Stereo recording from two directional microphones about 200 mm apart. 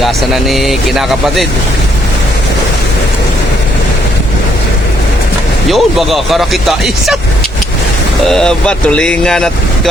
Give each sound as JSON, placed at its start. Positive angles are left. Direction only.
{"t": 0.0, "sound": "speech", "side_deg": 0}
{"t": 5.7, "sound": "speech", "side_deg": 0}
{"t": 8.2, "sound": "speech", "side_deg": 0}